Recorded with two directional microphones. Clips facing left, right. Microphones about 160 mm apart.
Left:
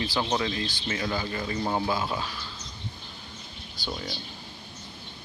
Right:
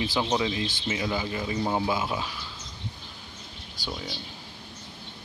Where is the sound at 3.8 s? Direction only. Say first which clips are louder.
Left 1 dB; 40° right (ahead or behind).